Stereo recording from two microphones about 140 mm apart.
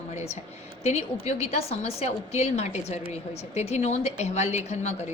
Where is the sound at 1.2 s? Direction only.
50° left (ahead or behind).